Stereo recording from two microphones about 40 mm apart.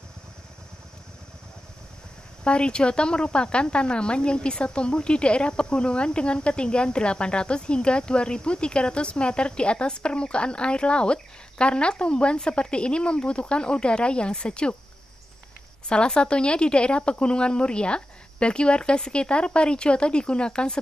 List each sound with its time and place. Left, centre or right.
2.4 s speech: left
15.9 s speech: left